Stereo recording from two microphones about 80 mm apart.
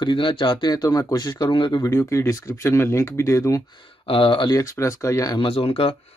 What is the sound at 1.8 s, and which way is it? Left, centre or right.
Speech, left.